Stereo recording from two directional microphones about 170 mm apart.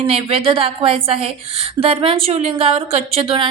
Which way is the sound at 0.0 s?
35° right (ahead or behind).